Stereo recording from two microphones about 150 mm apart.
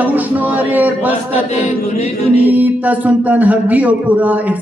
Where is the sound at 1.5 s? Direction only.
50° left (ahead or behind).